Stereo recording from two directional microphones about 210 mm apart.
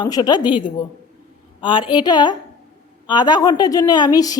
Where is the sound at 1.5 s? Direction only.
20° left (ahead or behind).